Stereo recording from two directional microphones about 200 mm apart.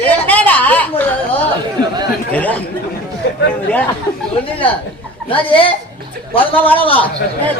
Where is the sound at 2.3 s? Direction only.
5° left (ahead or behind).